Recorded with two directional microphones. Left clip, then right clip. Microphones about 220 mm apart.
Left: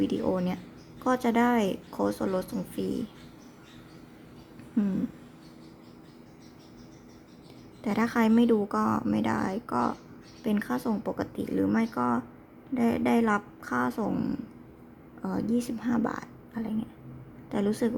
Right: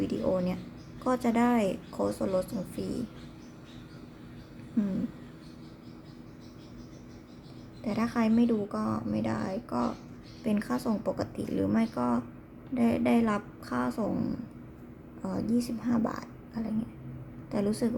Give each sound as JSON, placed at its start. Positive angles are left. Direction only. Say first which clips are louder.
{"t": 0.0, "sound": "a woman's voice", "louder": "left 1 dB", "side_deg": 20}
{"t": 7.9, "sound": "a woman's voice", "louder": "left 4 dB", "side_deg": 30}